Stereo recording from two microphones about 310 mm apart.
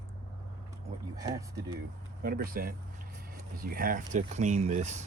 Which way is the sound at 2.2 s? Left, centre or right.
Right.